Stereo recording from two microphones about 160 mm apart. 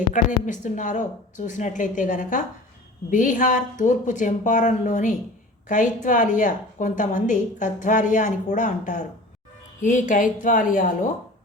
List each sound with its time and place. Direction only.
0.1 s a woman's voice: 50° left (ahead or behind)